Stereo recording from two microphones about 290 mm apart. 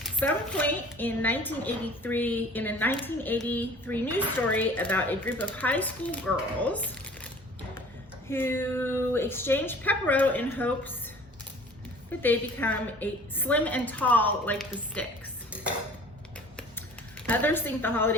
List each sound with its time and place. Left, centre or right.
0.0 s a woman's voice: centre
8.3 s a woman's voice: centre
12.2 s a woman's voice: centre
17.2 s a woman's voice: centre